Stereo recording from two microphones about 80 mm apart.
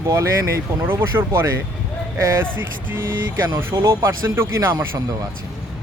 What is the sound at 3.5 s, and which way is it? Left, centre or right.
Speech, right.